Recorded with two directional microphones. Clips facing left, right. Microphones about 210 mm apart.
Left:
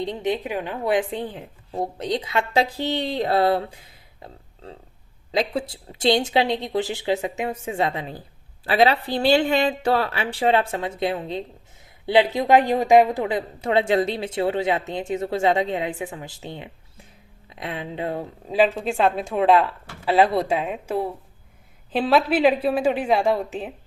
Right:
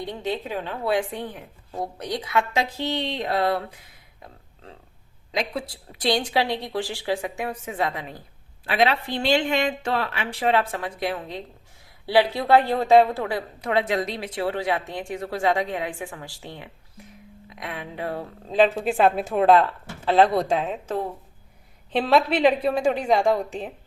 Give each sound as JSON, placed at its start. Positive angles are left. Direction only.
{"t": 0.0, "sound": "speech", "side_deg": 20}
{"t": 18.4, "sound": "a woman's voice", "side_deg": 10}
{"t": 18.8, "sound": "speech", "side_deg": -5}